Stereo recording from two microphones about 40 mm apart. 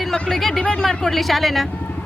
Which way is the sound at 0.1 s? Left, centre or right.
Centre.